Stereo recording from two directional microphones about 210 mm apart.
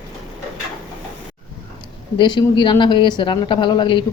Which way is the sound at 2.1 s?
20° left (ahead or behind).